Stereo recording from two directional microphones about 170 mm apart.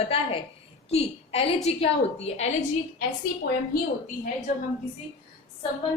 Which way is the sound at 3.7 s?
60° left (ahead or behind).